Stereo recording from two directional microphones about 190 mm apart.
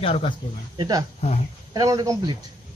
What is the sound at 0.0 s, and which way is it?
Speech, 30° left (ahead or behind).